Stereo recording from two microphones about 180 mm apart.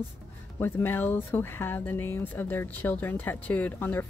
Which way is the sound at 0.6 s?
10° left (ahead or behind).